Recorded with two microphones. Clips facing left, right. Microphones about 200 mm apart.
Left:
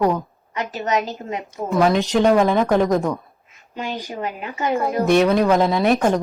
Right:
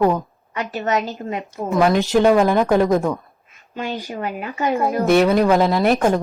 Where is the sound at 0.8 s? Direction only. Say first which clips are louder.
Even; 20° left (ahead or behind).